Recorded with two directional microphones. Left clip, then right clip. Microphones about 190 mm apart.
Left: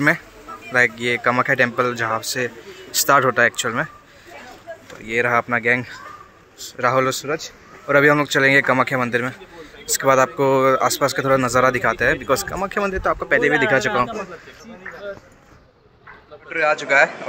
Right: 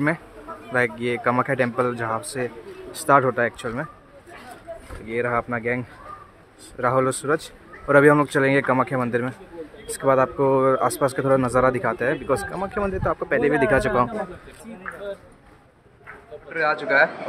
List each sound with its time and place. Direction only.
0.7 s speech: 5° right (ahead or behind)
5.0 s speech: centre (ahead or behind)
7.2 s a man's voice: 25° right (ahead or behind)
7.8 s speech: 15° right (ahead or behind)
12.4 s speech: 10° left (ahead or behind)
12.7 s speech: 5° right (ahead or behind)
16.4 s speech: centre (ahead or behind)